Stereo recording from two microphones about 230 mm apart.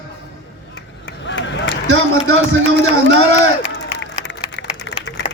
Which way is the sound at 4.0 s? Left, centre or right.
Left.